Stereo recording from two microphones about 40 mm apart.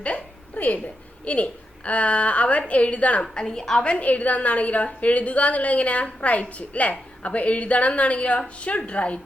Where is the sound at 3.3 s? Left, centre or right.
Centre.